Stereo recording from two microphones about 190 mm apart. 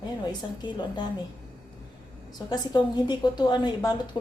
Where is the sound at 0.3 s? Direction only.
25° left (ahead or behind).